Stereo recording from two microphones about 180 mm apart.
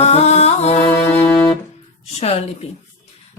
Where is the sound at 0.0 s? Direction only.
35° left (ahead or behind).